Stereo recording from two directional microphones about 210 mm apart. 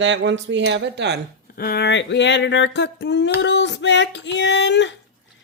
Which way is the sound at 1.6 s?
50° left (ahead or behind).